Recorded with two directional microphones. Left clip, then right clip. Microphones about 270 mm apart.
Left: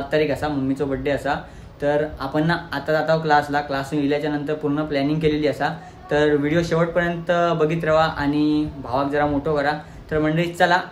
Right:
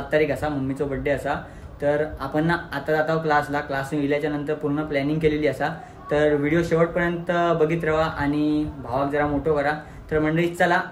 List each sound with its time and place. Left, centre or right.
0.1 s speech: centre